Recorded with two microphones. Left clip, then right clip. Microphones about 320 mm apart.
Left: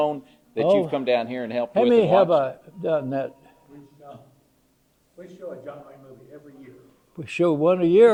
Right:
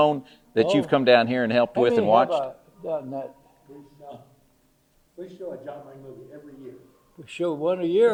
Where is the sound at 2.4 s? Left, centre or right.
Left.